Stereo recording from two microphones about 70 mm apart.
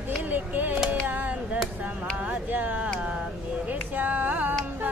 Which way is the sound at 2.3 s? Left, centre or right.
Right.